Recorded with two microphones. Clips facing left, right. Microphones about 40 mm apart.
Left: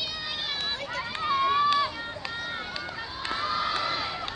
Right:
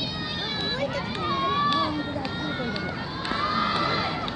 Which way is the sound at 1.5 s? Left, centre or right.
Centre.